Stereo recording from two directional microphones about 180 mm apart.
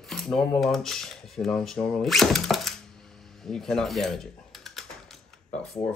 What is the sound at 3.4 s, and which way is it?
Typing, 5° left (ahead or behind).